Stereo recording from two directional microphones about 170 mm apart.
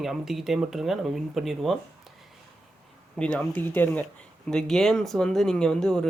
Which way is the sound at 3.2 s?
5° left (ahead or behind).